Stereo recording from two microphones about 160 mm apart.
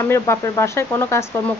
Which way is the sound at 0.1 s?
15° left (ahead or behind).